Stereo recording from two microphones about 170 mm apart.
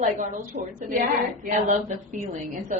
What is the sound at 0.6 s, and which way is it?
Speech, 65° right (ahead or behind).